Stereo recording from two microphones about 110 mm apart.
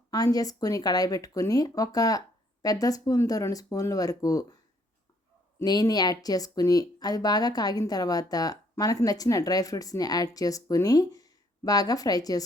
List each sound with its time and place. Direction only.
0.1 s speech: 35° left (ahead or behind)
5.5 s speech: 35° left (ahead or behind)